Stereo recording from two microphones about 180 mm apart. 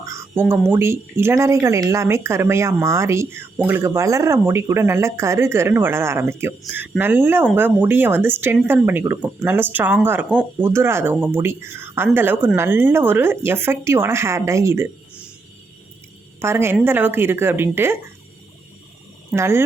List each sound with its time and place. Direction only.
0.0 s speech: 15° right (ahead or behind)
16.4 s speech: 15° right (ahead or behind)
19.3 s speech: 15° right (ahead or behind)